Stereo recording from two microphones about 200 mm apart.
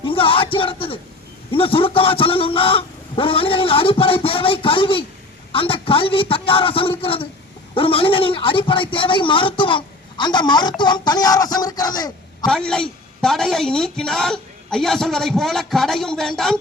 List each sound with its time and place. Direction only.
0.0 s a man's voice: 25° left (ahead or behind)
12.5 s a woman's voice: 5° left (ahead or behind)